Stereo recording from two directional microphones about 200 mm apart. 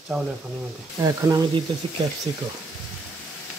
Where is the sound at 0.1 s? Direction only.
Centre (ahead or behind).